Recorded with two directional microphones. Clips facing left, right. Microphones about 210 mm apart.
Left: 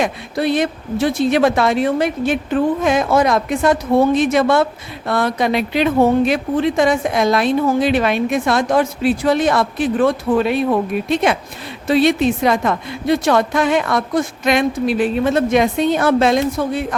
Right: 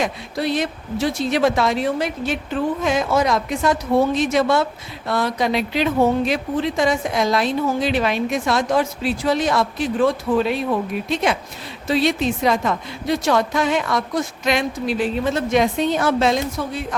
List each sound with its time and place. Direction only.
0.0 s speech: 55° left (ahead or behind)